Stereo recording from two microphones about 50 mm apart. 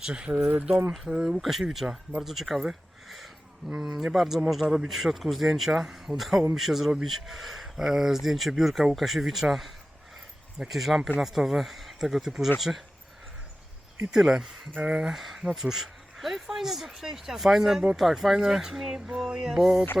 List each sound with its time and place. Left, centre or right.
0.0 s speech: centre
1.1 s speech: centre
1.4 s speech: centre
4.6 s speech: centre
4.9 s speech: centre
14.1 s speech: centre
14.7 s speech: right
15.1 s speech: centre